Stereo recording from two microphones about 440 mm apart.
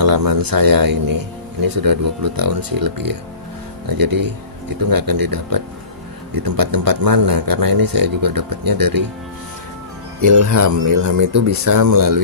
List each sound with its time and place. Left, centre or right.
0.0 s speech: right
10.2 s speech: right